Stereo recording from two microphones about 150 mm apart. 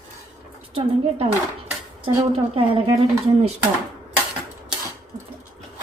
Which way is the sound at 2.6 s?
40° right (ahead or behind).